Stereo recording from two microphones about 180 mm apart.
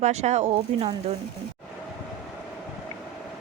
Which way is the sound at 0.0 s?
40° right (ahead or behind).